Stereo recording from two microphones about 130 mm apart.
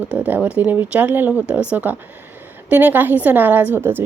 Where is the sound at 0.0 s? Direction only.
10° right (ahead or behind).